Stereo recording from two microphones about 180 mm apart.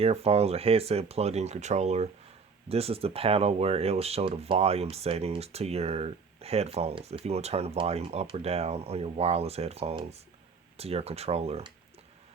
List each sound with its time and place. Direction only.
0.0 s speech: 35° right (ahead or behind)